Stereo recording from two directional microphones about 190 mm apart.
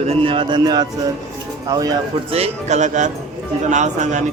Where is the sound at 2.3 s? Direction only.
35° right (ahead or behind).